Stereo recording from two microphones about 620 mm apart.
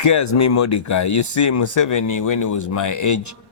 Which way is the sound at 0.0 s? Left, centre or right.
Left.